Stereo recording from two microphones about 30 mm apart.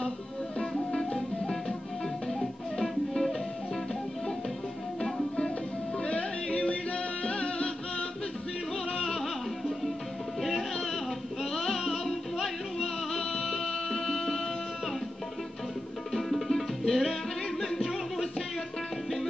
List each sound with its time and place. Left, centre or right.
2.8 s music: centre
6.0 s music: left
9.0 s music: centre
11.7 s music: centre
16.1 s music: centre